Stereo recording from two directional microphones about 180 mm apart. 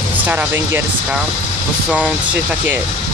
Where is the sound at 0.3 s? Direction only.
10° right (ahead or behind).